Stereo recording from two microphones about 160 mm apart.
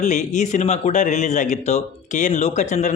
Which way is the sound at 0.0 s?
50° left (ahead or behind).